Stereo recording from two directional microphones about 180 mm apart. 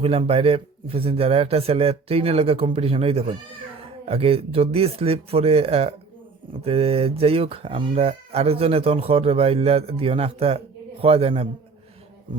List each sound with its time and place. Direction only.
0.0 s speech: 30° right (ahead or behind)